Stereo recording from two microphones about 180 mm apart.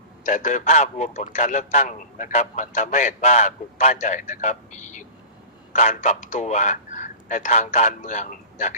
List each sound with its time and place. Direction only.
0.3 s a man's voice: 45° left (ahead or behind)